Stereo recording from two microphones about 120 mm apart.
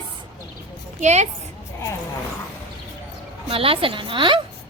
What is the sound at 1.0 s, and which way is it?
Speech, 70° right (ahead or behind).